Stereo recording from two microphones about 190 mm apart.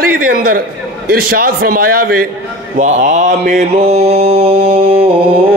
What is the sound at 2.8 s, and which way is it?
Mantra, 40° right (ahead or behind).